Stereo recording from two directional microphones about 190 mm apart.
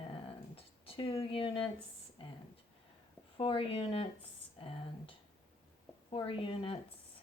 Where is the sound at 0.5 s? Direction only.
30° left (ahead or behind).